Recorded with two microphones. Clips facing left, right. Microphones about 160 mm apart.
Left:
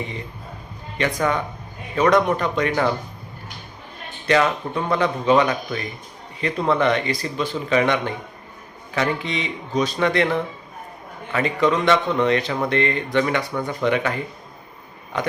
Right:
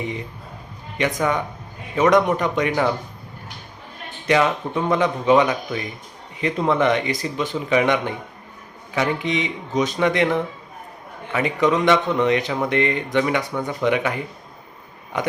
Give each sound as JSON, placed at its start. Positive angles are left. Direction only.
{"t": 0.9, "sound": "speech", "side_deg": -15}
{"t": 4.3, "sound": "speech", "side_deg": -15}